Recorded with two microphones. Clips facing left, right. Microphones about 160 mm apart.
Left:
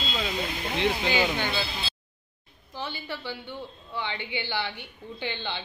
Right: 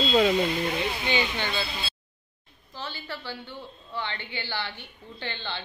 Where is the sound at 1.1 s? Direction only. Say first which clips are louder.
Left 2 dB; 10° left (ahead or behind).